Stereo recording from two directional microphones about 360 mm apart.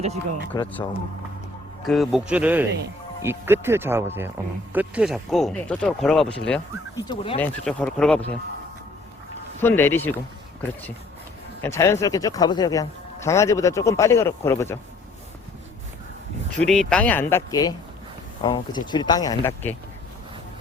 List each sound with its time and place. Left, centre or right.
0.5 s speech: centre
9.6 s speech: centre
11.6 s speech: centre
16.5 s speech: centre